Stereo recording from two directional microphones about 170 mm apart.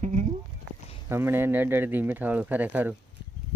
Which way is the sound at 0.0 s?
45° right (ahead or behind).